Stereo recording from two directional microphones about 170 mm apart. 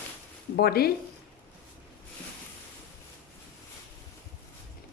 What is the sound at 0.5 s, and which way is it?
Speech, 65° left (ahead or behind).